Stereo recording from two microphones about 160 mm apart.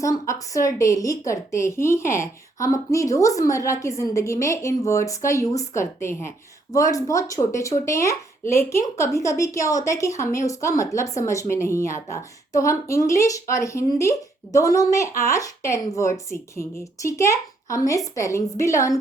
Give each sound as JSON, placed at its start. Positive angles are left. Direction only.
{"t": 0.0, "sound": "a woman's voice", "side_deg": 20}